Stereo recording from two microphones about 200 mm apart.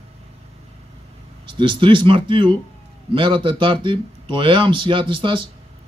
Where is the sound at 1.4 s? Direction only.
25° right (ahead or behind).